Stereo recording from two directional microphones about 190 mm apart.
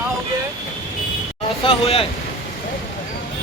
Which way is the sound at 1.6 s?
30° left (ahead or behind).